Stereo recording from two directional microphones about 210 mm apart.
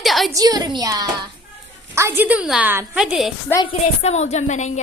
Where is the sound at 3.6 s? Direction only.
30° left (ahead or behind).